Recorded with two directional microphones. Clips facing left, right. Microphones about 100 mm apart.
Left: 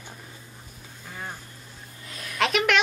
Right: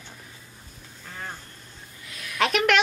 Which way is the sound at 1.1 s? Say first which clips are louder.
Even; 10° left (ahead or behind).